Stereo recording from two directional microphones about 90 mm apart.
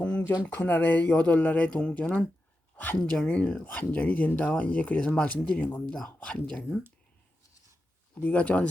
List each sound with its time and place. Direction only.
0.4 s speech: 20° left (ahead or behind)
8.1 s speech: 15° left (ahead or behind)